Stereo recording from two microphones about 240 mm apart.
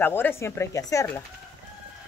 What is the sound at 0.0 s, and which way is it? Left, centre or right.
Speech, centre.